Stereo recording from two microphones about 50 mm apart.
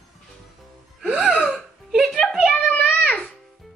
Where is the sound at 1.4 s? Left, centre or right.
Centre.